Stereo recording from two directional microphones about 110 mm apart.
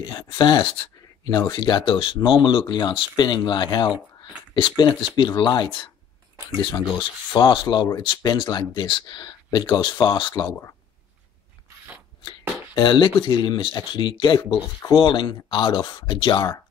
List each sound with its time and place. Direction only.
0.2 s speech: 45° left (ahead or behind)
10.3 s speech: 30° left (ahead or behind)
12.3 s speech: 45° left (ahead or behind)